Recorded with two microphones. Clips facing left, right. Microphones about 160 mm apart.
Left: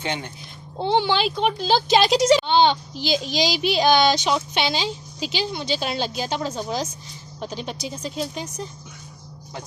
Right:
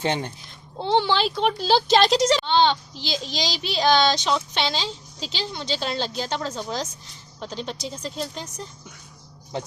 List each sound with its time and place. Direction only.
0.0 s a child's voice: 35° right (ahead or behind)
0.8 s speech: 10° left (ahead or behind)